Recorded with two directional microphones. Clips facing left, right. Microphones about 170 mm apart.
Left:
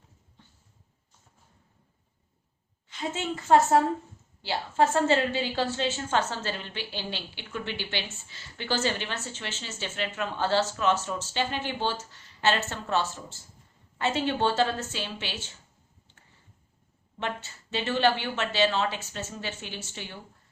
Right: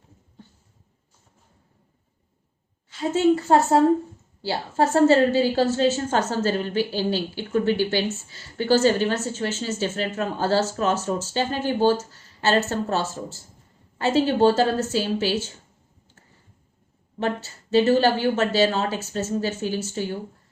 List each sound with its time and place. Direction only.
2.9 s a woman's voice: 35° right (ahead or behind)
17.2 s a woman's voice: 40° right (ahead or behind)